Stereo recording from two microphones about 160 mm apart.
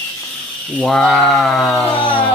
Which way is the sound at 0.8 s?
5° left (ahead or behind).